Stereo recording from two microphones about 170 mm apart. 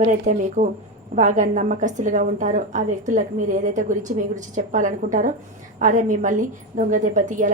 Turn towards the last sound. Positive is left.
turn(degrees=-50)  # may be behind; listen again after turning